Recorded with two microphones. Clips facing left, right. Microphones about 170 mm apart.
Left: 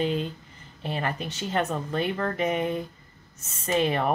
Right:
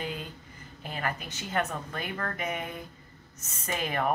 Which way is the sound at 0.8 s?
30° left (ahead or behind).